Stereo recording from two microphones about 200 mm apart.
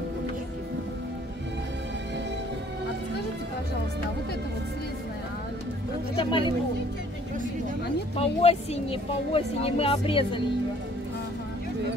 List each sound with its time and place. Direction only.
6.1 s a woman's voice: 25° left (ahead or behind)
8.2 s a woman's voice: 30° left (ahead or behind)